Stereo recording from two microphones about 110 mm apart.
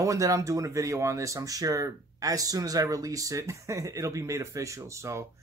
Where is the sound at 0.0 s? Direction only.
30° right (ahead or behind).